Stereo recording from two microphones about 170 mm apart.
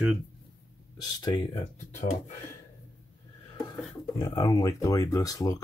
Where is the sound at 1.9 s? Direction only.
45° left (ahead or behind).